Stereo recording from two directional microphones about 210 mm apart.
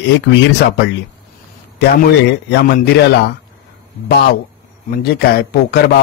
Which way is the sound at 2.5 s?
50° left (ahead or behind).